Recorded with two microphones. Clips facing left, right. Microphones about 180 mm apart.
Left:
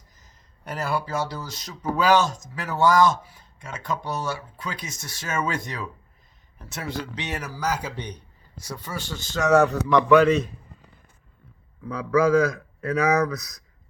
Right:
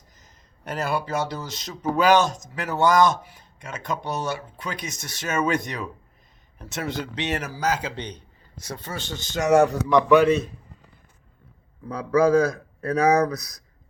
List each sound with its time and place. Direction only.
0.2 s speech: 20° right (ahead or behind)
11.9 s speech: 35° right (ahead or behind)